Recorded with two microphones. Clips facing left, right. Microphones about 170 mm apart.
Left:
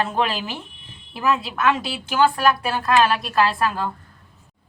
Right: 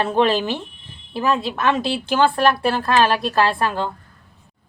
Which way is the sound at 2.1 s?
30° right (ahead or behind).